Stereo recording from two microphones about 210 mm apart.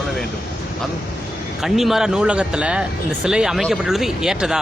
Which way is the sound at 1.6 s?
Centre (ahead or behind).